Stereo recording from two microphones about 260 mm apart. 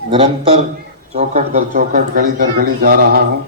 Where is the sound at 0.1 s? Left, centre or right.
Right.